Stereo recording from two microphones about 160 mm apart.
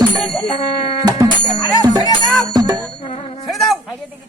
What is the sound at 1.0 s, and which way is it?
Music, 25° right (ahead or behind).